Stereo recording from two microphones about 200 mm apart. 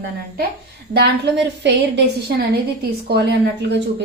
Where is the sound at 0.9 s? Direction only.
55° right (ahead or behind).